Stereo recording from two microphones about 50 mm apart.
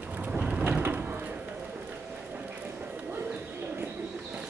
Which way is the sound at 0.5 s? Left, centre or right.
Right.